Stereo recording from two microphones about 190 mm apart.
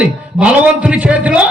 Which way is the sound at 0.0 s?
5° right (ahead or behind).